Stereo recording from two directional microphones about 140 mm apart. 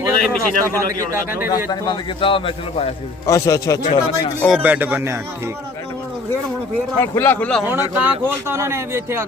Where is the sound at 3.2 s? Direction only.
25° left (ahead or behind).